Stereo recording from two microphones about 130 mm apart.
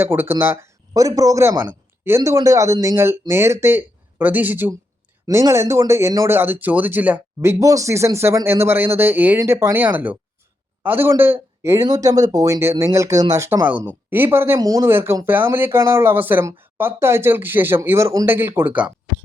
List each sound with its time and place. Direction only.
0.0 s speech: 15° right (ahead or behind)
7.6 s speech: 25° right (ahead or behind)